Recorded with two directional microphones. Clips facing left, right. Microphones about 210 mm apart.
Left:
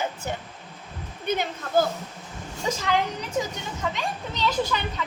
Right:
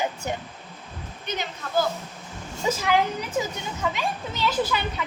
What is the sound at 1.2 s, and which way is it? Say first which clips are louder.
Speech: left 5 dB; 50° left (ahead or behind).